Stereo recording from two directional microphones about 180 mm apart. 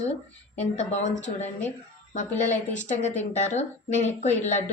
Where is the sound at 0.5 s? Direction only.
35° left (ahead or behind).